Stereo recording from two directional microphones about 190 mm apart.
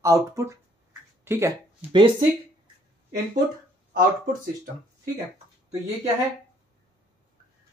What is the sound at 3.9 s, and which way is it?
Speech, 45° right (ahead or behind).